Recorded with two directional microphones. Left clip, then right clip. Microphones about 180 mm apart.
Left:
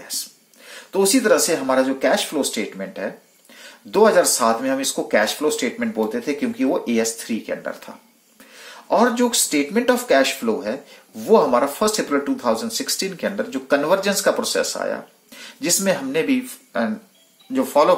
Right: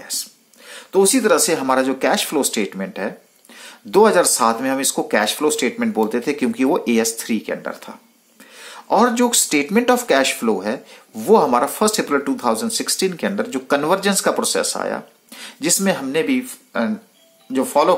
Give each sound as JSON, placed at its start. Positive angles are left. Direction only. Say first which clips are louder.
{"t": 0.0, "sound": "speech", "louder": "right 2 dB", "side_deg": -15}
{"t": 8.5, "sound": "speech", "louder": "right 2 dB", "side_deg": -25}